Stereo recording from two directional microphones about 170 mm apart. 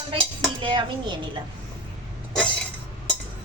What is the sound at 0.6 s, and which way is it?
Speech, 30° right (ahead or behind).